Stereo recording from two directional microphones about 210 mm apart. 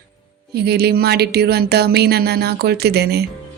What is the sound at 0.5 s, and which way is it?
Speech, 50° right (ahead or behind).